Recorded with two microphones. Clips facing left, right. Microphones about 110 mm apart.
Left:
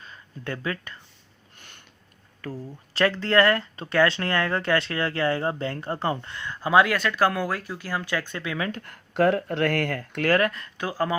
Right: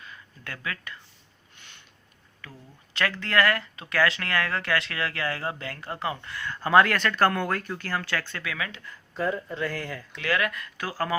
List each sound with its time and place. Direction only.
0.0 s speech: 30° left (ahead or behind)
1.5 s a sound: 45° left (ahead or behind)
2.4 s speech: 35° left (ahead or behind); by 8.4 s 15° left (ahead or behind)
8.4 s speech: 30° left (ahead or behind)
8.8 s speech: 65° left (ahead or behind); by 11.2 s 20° left (ahead or behind)